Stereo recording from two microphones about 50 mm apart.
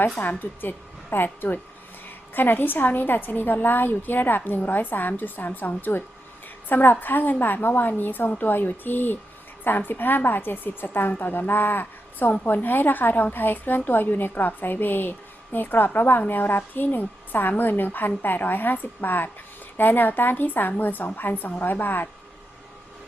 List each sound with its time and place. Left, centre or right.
0.2 s a woman's voice: left